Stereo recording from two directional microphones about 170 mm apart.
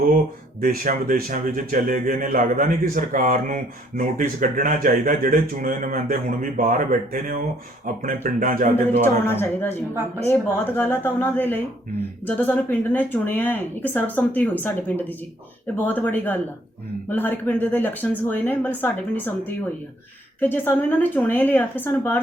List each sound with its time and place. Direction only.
0.6 s a man's voice: 55° right (ahead or behind)
9.2 s speech: 15° left (ahead or behind)